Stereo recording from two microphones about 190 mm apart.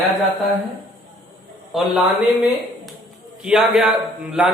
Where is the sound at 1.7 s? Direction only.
Centre (ahead or behind).